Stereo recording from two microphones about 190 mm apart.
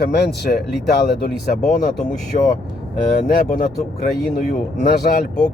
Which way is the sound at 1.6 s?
45° left (ahead or behind).